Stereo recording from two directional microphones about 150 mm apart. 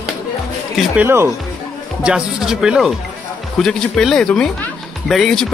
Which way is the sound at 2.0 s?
5° right (ahead or behind).